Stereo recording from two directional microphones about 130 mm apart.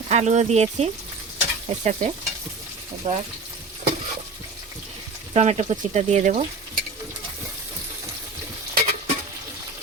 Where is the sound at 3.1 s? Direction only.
50° right (ahead or behind).